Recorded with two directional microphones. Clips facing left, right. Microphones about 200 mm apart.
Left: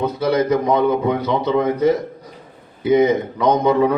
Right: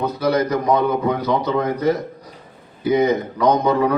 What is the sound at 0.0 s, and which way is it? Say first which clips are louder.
A man's voice: left 1 dB; 25° left (ahead or behind).